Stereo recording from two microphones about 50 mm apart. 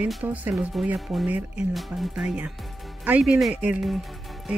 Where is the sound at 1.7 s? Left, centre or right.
Centre.